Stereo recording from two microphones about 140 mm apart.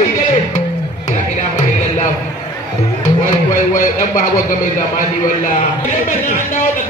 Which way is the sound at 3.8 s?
75° left (ahead or behind).